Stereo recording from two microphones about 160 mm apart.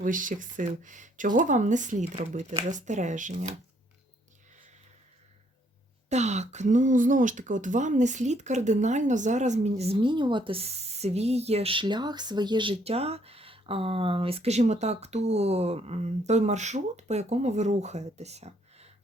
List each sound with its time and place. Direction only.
0.0 s speech: 55° right (ahead or behind)
6.1 s speech: 45° right (ahead or behind)